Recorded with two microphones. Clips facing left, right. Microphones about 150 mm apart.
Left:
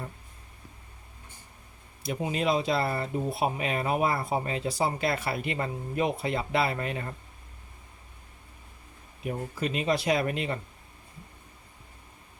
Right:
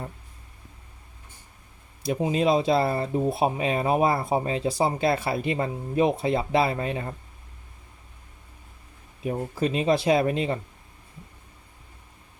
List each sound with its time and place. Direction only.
2.0 s speech: 25° right (ahead or behind)
9.2 s speech: 30° right (ahead or behind)